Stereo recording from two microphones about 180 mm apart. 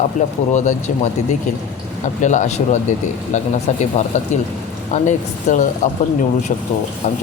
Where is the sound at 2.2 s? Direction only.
40° left (ahead or behind).